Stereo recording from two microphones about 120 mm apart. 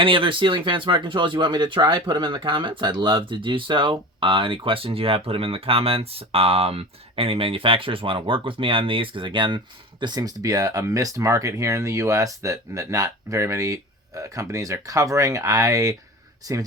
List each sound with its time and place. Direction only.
0.0 s speech: 45° right (ahead or behind)